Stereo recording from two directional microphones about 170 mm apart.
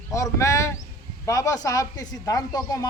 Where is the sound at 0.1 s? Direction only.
20° left (ahead or behind).